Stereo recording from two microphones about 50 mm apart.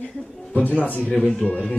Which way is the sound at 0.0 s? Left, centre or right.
Centre.